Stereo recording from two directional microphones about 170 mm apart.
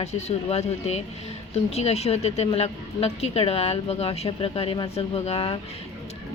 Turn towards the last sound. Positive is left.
turn(degrees=35)  # may be behind; listen again after turning